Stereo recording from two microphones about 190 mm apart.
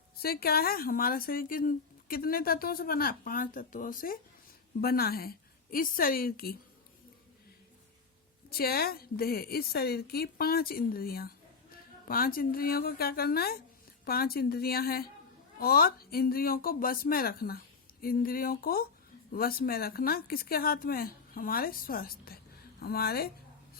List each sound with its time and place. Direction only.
0.2 s speech: 55° left (ahead or behind)
8.4 s speech: 50° left (ahead or behind)